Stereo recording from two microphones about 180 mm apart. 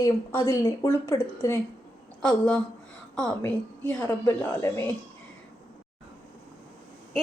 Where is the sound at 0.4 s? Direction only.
15° left (ahead or behind).